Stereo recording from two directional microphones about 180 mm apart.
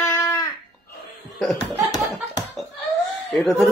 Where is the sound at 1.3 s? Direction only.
Centre (ahead or behind).